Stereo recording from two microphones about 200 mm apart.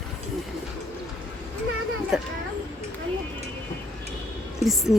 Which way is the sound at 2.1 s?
5° right (ahead or behind).